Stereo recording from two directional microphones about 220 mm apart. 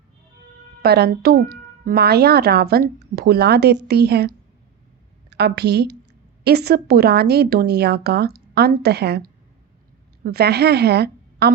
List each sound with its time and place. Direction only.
0.8 s a woman's voice: 45° right (ahead or behind)